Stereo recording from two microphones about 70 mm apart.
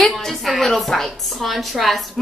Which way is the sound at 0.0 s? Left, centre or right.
Centre.